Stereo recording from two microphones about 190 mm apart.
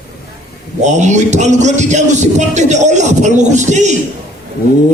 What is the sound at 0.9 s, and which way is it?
Speech, 40° right (ahead or behind).